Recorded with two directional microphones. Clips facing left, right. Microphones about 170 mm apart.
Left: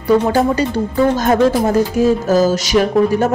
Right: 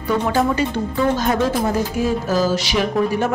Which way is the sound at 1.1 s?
45° left (ahead or behind).